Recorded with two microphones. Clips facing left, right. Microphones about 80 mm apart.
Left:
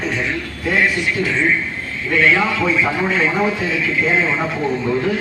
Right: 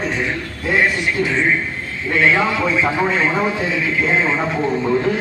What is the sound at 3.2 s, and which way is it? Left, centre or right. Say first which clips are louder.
Speech: even; centre.